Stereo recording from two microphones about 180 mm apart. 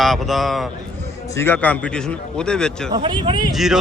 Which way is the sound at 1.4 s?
10° left (ahead or behind).